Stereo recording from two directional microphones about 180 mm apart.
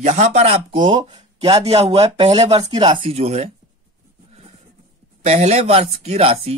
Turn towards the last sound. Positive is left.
turn(degrees=-35)  # may be behind; listen again after turning